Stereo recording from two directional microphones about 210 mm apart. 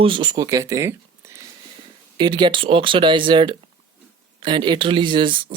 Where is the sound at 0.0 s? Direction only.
25° right (ahead or behind).